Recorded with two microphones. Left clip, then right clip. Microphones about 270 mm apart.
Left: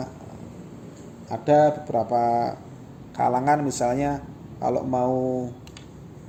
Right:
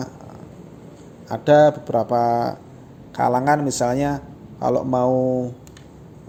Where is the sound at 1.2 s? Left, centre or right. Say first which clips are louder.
Right 4 dB; right.